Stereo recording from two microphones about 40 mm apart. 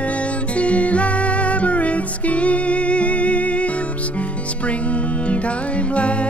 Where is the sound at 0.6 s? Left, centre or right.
Left.